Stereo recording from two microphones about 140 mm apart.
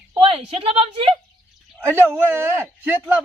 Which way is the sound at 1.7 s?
15° right (ahead or behind).